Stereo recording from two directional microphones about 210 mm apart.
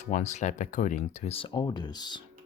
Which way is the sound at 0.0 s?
35° left (ahead or behind).